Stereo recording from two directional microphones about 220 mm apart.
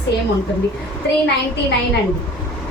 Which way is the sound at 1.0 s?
50° left (ahead or behind).